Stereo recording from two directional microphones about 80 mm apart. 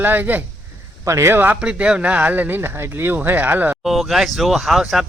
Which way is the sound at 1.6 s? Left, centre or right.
Centre.